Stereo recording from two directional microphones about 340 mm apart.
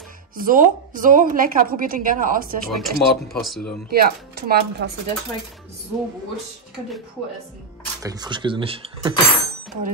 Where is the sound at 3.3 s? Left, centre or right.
Centre.